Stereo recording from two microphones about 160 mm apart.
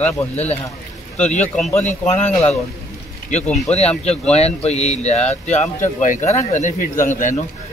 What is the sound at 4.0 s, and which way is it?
A man's voice, 40° left (ahead or behind).